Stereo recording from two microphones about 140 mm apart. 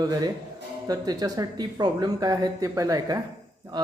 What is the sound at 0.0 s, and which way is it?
Speech, 25° right (ahead or behind).